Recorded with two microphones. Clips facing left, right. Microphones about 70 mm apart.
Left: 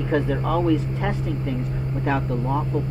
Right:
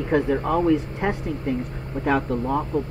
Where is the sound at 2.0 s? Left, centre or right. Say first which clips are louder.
Right 3 dB; right.